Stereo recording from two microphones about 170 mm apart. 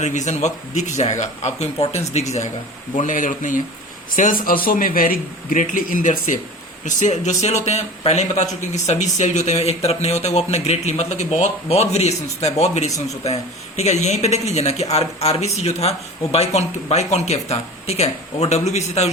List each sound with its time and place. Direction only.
0.0 s a man's voice: 45° left (ahead or behind)